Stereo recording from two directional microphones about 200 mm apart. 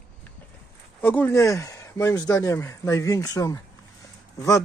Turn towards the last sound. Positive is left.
turn(degrees=15)  # may be behind; listen again after turning